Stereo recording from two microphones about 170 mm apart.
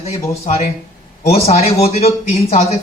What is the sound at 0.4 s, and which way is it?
Speech, 40° left (ahead or behind).